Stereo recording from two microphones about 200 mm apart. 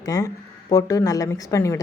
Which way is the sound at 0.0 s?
15° left (ahead or behind).